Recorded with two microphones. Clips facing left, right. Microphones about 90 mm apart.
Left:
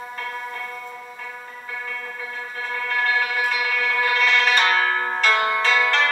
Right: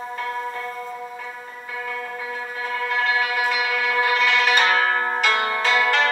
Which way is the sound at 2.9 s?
20° right (ahead or behind).